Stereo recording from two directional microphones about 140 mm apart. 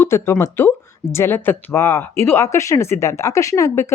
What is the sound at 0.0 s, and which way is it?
Speech, 20° left (ahead or behind).